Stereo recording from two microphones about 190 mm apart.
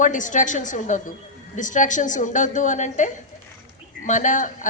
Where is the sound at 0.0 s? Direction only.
40° left (ahead or behind).